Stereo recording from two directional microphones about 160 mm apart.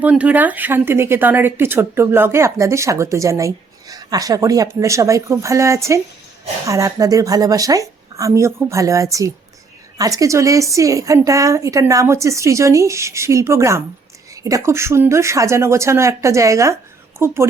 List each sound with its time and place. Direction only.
0.0 s a woman's voice: 10° right (ahead or behind)